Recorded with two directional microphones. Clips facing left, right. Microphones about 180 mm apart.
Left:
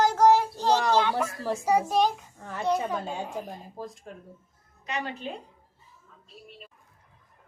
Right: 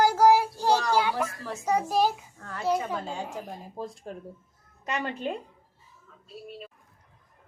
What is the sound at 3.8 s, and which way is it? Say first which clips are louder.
Speech: right 5 dB; 30° right (ahead or behind).